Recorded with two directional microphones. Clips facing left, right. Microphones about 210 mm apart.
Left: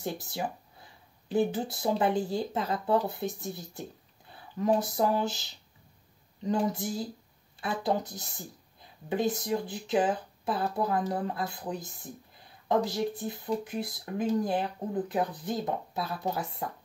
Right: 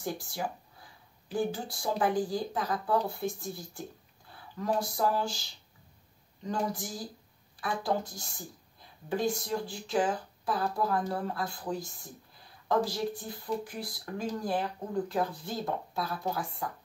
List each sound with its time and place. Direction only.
0.0 s speech: 20° left (ahead or behind)
6.7 s speech: 25° left (ahead or behind)